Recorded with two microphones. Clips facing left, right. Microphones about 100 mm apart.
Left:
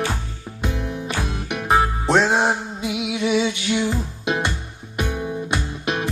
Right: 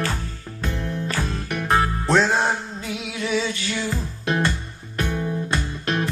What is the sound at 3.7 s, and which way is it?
Music, 20° left (ahead or behind).